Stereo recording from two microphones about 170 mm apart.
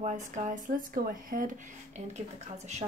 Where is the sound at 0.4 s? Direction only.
50° right (ahead or behind).